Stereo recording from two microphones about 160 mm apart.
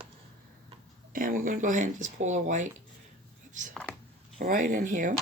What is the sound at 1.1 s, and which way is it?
Speech, 55° right (ahead or behind).